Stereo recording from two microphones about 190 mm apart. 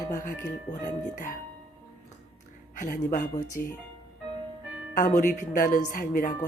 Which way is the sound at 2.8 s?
40° left (ahead or behind).